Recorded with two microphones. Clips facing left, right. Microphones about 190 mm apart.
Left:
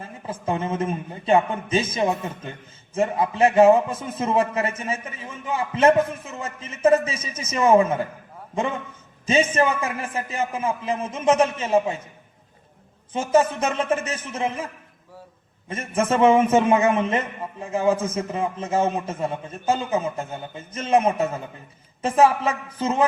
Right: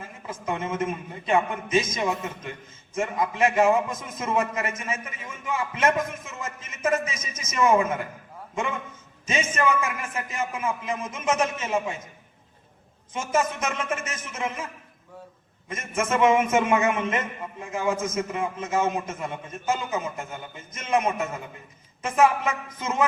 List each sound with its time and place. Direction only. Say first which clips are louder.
0.0 s a man's voice: left 4 dB; 30° left (ahead or behind)
13.1 s a man's voice: left 6 dB; 30° left (ahead or behind)
15.7 s a man's voice: left 4 dB; 35° left (ahead or behind)